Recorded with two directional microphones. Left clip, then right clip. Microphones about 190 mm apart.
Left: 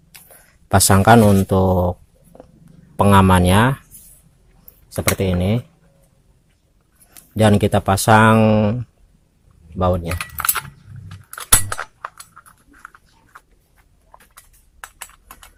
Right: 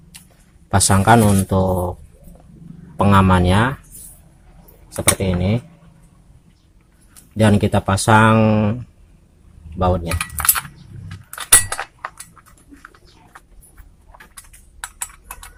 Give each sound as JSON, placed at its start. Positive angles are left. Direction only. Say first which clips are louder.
{"t": 0.7, "sound": "speech", "louder": "left 2 dB", "side_deg": 50}
{"t": 3.0, "sound": "speech", "louder": "left 1 dB", "side_deg": 45}
{"t": 5.4, "sound": "speech", "louder": "left 1 dB", "side_deg": 50}
{"t": 7.1, "sound": "speech", "louder": "left 1 dB", "side_deg": 50}
{"t": 10.1, "sound": "cutlery", "louder": "right 1 dB", "side_deg": 10}
{"t": 11.3, "sound": "chink", "louder": "right 2 dB", "side_deg": 10}